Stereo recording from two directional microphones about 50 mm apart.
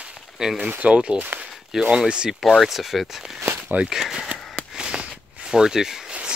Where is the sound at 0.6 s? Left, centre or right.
Right; by 2.4 s centre.